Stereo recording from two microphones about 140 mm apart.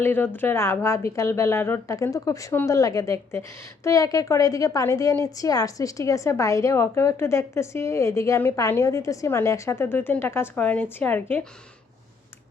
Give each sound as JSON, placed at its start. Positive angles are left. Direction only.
{"t": 0.0, "sound": "a woman's voice", "side_deg": 15}